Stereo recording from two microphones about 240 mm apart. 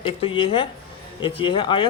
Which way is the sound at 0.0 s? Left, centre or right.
Left.